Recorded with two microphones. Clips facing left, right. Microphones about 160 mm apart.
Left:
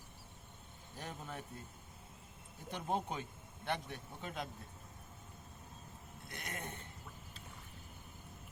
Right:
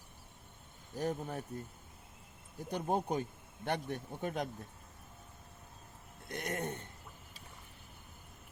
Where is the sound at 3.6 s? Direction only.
45° right (ahead or behind).